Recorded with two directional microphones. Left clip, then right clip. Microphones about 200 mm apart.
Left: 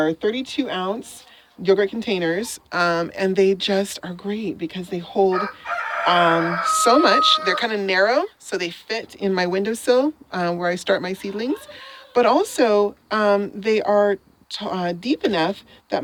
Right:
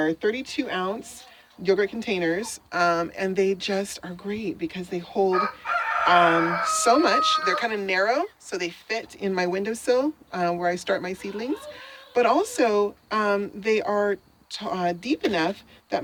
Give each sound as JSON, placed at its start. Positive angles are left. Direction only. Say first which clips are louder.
{"t": 0.0, "sound": "speech", "louder": "left 3 dB", "side_deg": 35}